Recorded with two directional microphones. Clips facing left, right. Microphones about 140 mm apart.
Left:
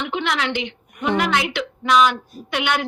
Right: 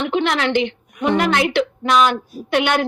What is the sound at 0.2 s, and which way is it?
A woman's voice, 45° right (ahead or behind).